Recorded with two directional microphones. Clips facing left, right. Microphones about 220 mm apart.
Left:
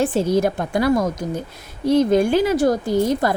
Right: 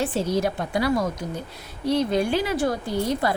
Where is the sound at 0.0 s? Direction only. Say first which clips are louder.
Left 5 dB; 50° left (ahead or behind).